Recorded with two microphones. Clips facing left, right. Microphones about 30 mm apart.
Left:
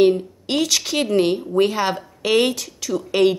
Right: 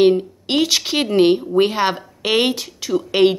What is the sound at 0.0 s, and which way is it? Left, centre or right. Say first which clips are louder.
Speech: right 2 dB; right.